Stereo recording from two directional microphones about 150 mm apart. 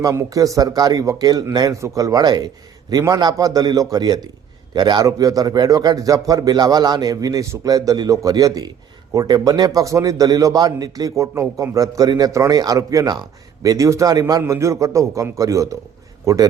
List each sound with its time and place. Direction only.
0.0 s a man's voice: 20° right (ahead or behind)